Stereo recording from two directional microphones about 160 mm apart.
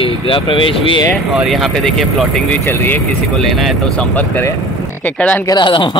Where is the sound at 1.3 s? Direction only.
Centre (ahead or behind).